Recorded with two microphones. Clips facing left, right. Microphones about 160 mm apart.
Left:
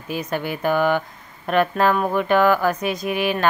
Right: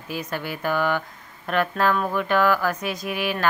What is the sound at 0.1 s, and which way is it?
Speech, 20° left (ahead or behind).